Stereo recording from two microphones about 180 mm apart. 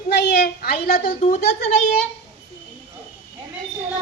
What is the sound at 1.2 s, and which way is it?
Speech, 45° left (ahead or behind).